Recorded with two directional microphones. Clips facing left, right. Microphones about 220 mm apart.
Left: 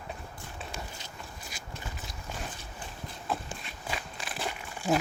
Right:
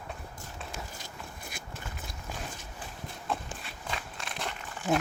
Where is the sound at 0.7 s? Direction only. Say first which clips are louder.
Even; 55° right (ahead or behind).